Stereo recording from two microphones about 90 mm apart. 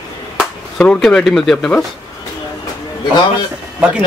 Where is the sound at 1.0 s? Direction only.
5° left (ahead or behind).